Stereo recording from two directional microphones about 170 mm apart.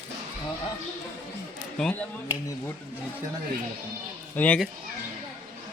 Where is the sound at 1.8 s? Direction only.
10° left (ahead or behind).